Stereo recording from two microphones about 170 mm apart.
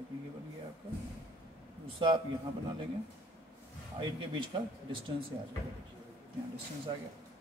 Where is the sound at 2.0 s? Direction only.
30° right (ahead or behind).